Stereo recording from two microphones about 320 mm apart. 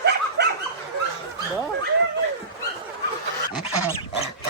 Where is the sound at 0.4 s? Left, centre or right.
Right.